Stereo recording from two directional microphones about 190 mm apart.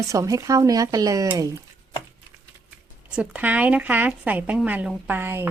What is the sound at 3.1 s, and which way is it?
A woman's voice, 5° right (ahead or behind).